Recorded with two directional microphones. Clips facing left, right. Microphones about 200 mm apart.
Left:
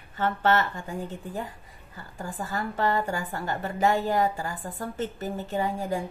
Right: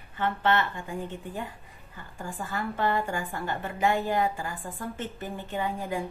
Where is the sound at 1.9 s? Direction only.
40° left (ahead or behind).